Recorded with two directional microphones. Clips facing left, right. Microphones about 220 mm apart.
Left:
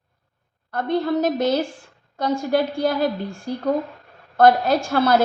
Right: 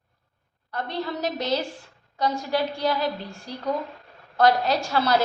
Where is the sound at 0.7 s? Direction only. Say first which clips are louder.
Left 8 dB; 50° left (ahead or behind).